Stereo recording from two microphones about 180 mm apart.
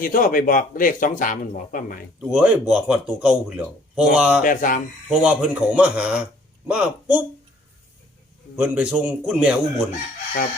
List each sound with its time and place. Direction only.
0.0 s a man's voice: 50° left (ahead or behind)
2.2 s a man's voice: 5° right (ahead or behind)
4.4 s a man's voice: 50° left (ahead or behind)
5.0 s speech: 5° right (ahead or behind)
8.5 s a man's voice: 5° right (ahead or behind)